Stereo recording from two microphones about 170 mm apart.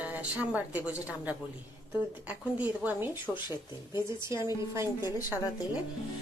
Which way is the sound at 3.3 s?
25° left (ahead or behind).